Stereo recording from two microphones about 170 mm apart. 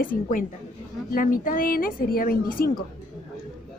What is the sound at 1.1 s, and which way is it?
A woman's voice, 55° left (ahead or behind).